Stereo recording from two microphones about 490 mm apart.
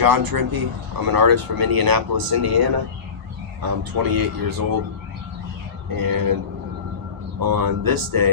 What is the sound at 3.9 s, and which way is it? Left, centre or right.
Speech, right.